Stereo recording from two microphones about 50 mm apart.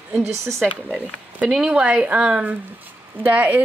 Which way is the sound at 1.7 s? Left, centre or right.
Right.